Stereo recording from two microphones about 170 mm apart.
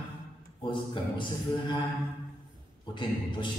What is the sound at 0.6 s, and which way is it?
Speech, 30° left (ahead or behind).